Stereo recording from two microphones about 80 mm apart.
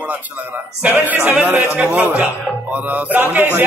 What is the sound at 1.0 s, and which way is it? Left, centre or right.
A man's voice, right.